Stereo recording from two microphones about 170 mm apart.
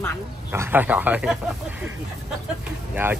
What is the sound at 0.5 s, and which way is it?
Speech, 10° right (ahead or behind).